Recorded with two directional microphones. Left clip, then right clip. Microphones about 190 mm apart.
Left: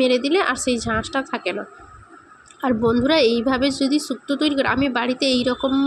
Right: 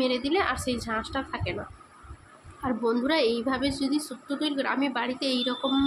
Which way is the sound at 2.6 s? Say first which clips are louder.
Left 8 dB; 25° left (ahead or behind).